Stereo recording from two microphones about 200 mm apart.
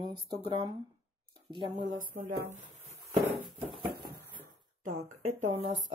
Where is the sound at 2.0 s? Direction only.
40° right (ahead or behind).